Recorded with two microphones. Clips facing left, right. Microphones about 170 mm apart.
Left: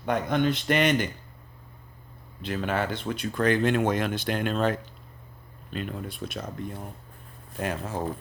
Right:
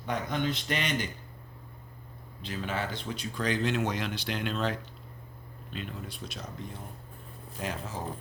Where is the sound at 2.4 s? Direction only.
60° left (ahead or behind).